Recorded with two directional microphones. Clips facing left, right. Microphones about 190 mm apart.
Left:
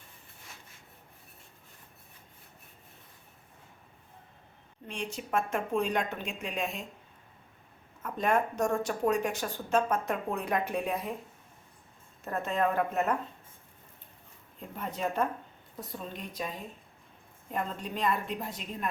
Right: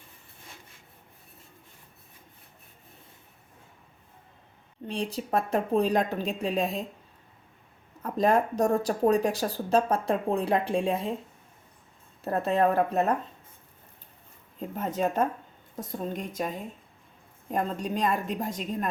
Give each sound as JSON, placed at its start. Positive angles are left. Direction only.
{"t": 4.9, "sound": "speech", "side_deg": -35}
{"t": 8.0, "sound": "speech", "side_deg": -35}
{"t": 12.2, "sound": "speech", "side_deg": -35}
{"t": 14.8, "sound": "a woman's voice", "side_deg": -45}
{"t": 17.5, "sound": "a woman's voice", "side_deg": -40}